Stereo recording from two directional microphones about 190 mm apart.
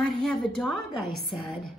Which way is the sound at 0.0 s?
5° left (ahead or behind).